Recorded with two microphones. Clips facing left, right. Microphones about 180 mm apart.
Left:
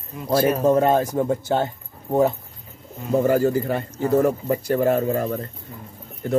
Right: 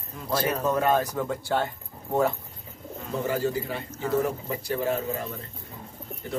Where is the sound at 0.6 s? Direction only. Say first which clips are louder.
Left 6 dB; 30° left (ahead or behind).